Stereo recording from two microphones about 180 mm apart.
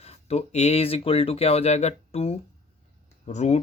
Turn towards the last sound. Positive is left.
turn(degrees=40)  # may be behind; listen again after turning